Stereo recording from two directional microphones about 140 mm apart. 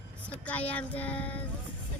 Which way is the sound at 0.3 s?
10° left (ahead or behind).